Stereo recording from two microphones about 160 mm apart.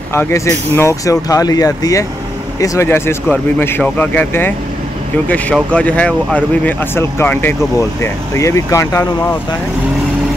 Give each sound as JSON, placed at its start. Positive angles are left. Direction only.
{"t": 0.1, "sound": "speech", "side_deg": 15}